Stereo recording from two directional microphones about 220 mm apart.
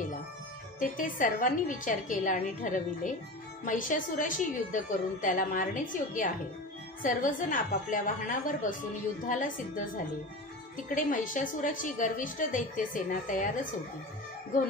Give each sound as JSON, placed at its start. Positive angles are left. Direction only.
{"t": 0.7, "sound": "a woman's voice", "side_deg": 35}
{"t": 11.1, "sound": "a woman's voice", "side_deg": 35}